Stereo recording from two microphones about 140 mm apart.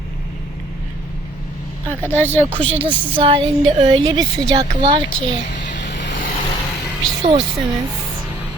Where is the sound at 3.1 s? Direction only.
40° right (ahead or behind).